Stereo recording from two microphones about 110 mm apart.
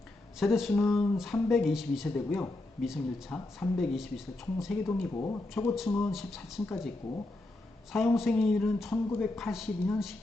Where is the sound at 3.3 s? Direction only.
5° left (ahead or behind).